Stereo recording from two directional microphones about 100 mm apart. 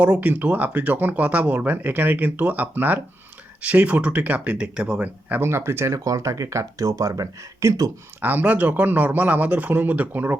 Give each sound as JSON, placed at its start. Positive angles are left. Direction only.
{"t": 0.0, "sound": "speech", "side_deg": -15}
{"t": 8.2, "sound": "speech", "side_deg": -20}